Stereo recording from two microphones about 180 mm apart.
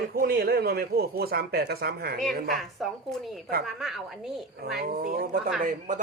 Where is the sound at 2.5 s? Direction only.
Centre (ahead or behind).